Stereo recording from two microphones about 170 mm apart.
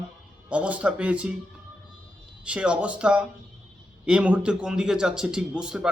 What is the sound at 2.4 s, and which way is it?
A man's voice, 5° right (ahead or behind).